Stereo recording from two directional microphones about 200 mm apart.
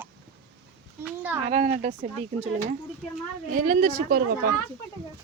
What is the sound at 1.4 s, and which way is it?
Speech, 35° right (ahead or behind).